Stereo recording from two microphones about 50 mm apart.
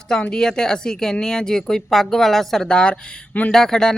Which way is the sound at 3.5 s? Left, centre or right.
Centre.